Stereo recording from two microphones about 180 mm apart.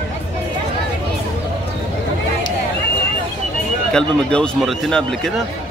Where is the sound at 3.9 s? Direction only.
5° left (ahead or behind).